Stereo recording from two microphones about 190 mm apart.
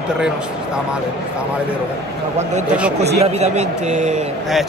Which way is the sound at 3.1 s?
35° right (ahead or behind).